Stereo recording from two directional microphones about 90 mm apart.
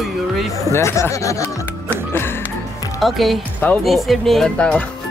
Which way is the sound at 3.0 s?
Centre (ahead or behind).